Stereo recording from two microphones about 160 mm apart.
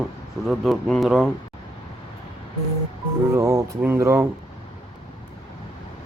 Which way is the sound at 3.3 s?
20° right (ahead or behind).